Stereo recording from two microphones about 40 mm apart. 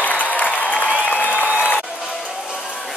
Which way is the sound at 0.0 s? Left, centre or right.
Left.